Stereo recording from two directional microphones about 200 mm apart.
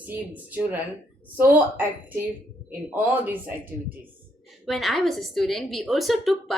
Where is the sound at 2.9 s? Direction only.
10° right (ahead or behind).